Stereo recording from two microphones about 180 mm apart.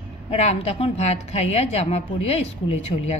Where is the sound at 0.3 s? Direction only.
35° left (ahead or behind).